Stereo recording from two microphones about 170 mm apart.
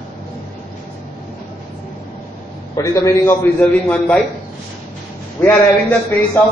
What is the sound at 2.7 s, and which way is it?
A man's voice, 20° left (ahead or behind).